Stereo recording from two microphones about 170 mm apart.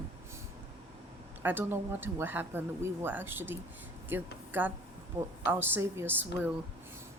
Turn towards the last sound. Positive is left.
turn(degrees=-10)  # may be behind; listen again after turning